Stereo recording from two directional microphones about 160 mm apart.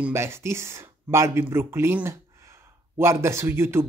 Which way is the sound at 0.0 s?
15° right (ahead or behind).